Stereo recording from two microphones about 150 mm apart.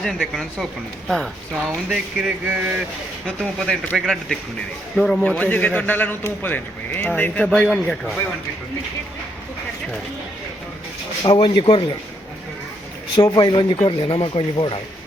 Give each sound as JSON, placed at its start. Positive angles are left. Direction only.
{"t": 0.0, "sound": "a man's voice", "side_deg": 0}
{"t": 11.2, "sound": "speech", "side_deg": 30}
{"t": 13.1, "sound": "speech", "side_deg": 30}